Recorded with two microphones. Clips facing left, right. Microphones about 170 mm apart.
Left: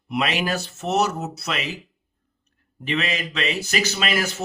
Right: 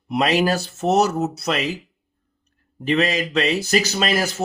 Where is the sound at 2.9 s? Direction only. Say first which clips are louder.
Right 6 dB; 40° right (ahead or behind).